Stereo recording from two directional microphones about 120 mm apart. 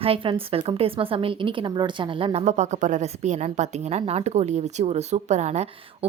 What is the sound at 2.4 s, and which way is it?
A woman's voice, 75° right (ahead or behind).